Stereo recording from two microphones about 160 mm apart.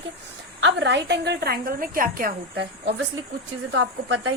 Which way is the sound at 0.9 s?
90° right.